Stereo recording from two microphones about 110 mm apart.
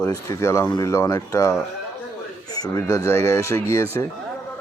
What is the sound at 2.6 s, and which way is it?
Speech, 30° left (ahead or behind).